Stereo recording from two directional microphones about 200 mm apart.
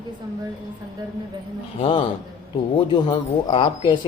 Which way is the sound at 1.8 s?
25° left (ahead or behind).